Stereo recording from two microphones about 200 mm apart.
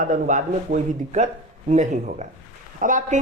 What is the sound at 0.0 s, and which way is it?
A woman's voice, 40° right (ahead or behind).